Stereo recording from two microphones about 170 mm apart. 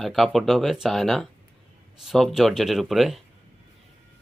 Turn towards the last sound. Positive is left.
turn(degrees=0)  # may be behind; listen again after turning